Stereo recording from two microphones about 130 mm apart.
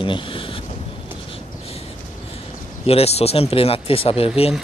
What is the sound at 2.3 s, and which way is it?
Speech, 50° left (ahead or behind).